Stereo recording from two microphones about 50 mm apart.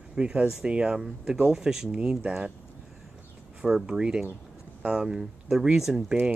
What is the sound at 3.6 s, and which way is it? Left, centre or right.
Speech, centre.